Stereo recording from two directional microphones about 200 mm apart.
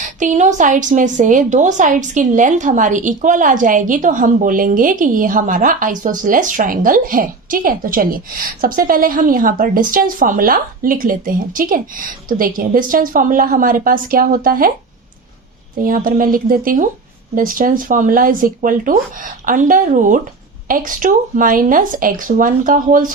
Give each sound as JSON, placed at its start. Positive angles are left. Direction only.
{"t": 0.0, "sound": "a woman's voice", "side_deg": -40}
{"t": 15.8, "sound": "speech", "side_deg": -45}